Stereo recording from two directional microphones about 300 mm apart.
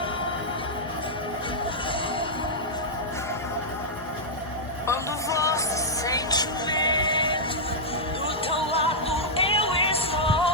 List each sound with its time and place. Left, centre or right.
4.9 s music: centre
8.4 s music: centre